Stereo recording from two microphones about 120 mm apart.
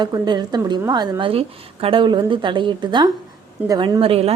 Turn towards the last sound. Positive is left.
turn(degrees=-55)  # may be behind; listen again after turning